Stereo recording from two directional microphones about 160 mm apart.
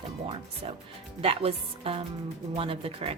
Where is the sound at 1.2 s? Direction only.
35° right (ahead or behind).